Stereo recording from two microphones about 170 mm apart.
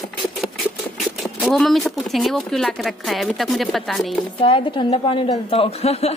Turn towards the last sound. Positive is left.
turn(degrees=35)  # may be behind; listen again after turning